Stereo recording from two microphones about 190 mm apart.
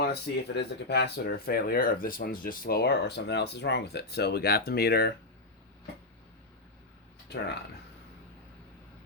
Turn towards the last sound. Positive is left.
turn(degrees=60)  # may be behind; listen again after turning